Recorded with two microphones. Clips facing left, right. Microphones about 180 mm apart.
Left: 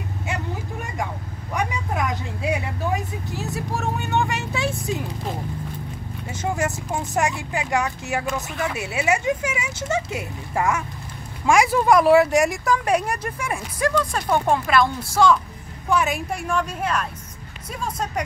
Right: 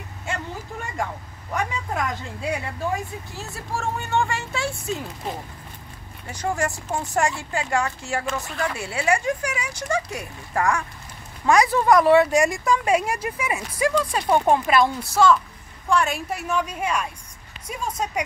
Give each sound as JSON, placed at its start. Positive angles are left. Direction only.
{"t": 1.5, "sound": "speech", "side_deg": 15}
{"t": 6.2, "sound": "speech", "side_deg": 20}
{"t": 11.4, "sound": "speech", "side_deg": 10}
{"t": 15.9, "sound": "speech", "side_deg": 0}